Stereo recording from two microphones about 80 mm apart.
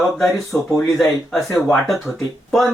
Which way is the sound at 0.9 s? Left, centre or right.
Centre.